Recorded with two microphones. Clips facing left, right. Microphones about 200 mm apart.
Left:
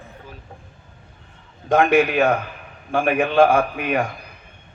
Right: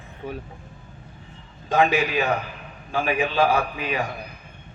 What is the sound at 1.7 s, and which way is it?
A man's voice, 55° left (ahead or behind).